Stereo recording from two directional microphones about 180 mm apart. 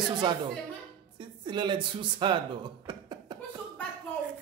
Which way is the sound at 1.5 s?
25° right (ahead or behind).